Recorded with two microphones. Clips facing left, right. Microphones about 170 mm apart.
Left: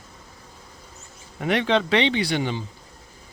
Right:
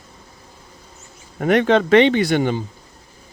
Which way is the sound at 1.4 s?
50° right (ahead or behind).